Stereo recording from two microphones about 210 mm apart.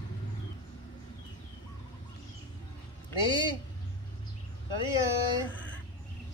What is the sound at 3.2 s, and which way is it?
Speech, 25° left (ahead or behind).